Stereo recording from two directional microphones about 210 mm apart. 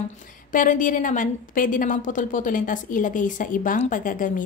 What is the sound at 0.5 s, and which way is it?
A woman's voice, 40° left (ahead or behind).